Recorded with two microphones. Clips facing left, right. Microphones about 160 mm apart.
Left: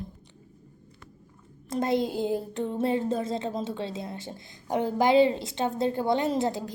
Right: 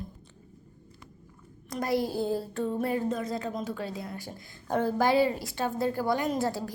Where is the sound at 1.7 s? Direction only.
25° left (ahead or behind).